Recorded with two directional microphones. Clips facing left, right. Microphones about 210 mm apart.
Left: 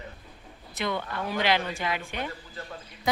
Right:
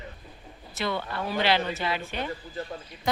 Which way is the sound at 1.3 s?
15° left (ahead or behind).